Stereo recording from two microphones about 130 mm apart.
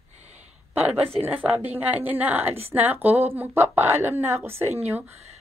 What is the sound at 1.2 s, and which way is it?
A woman's voice, 15° right (ahead or behind).